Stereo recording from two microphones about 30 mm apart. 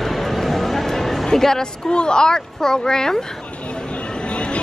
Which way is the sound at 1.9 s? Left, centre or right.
Left.